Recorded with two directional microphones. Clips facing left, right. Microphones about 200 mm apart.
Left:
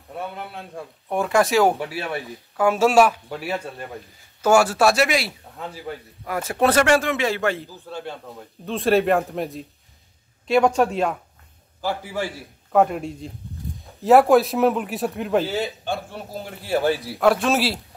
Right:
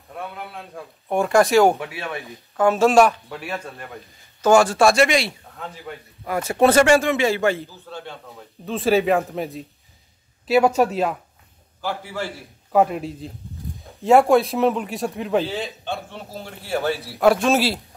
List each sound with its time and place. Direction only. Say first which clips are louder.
1.1 s a man's voice: right 3 dB; centre (ahead or behind)
1.8 s speech: left 3 dB; 35° left (ahead or behind)
2.0 s a man's voice: left 2 dB; 10° left (ahead or behind)
7.7 s speech: left 3 dB; 10° left (ahead or behind)
8.3 s a man's voice: even; centre (ahead or behind)
11.8 s speech: left 2 dB; 10° left (ahead or behind)
12.7 s a man's voice: even; centre (ahead or behind)
16.6 s a man's voice: left 3 dB; centre (ahead or behind)